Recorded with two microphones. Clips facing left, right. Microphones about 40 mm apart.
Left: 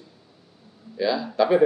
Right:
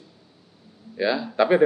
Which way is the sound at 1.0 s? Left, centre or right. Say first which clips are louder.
Even; right.